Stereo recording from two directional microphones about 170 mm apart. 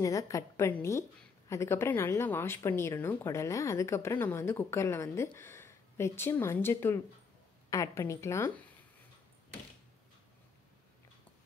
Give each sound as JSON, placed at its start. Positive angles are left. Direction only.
{"t": 0.0, "sound": "a woman's voice", "side_deg": 20}